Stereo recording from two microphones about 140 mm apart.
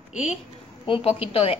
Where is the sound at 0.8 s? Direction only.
40° left (ahead or behind).